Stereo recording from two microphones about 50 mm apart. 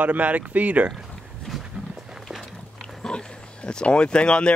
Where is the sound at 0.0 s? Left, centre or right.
Right.